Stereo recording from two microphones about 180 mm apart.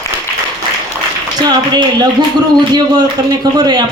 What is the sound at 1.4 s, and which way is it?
Speech, 25° right (ahead or behind).